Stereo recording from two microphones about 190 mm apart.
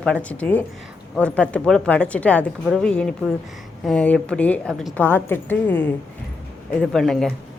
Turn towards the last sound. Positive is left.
turn(degrees=0)  # may be behind; listen again after turning